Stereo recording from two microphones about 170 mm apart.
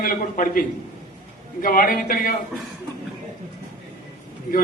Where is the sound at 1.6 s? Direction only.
55° left (ahead or behind).